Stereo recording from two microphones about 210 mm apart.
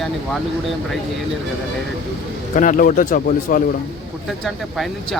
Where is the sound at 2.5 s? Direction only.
40° left (ahead or behind).